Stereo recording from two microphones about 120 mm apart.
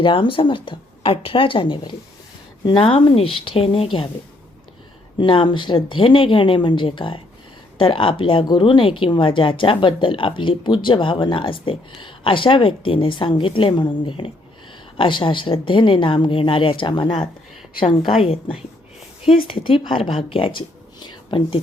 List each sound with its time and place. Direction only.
0.0 s speech: 45° left (ahead or behind)
5.1 s speech: 45° left (ahead or behind)